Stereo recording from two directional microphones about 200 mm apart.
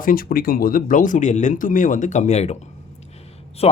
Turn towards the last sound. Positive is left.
turn(degrees=30)  # may be behind; listen again after turning